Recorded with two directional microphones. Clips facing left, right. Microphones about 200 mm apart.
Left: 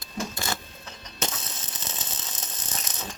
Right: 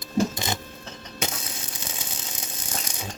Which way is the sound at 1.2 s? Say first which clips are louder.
Right 1 dB; 10° right (ahead or behind).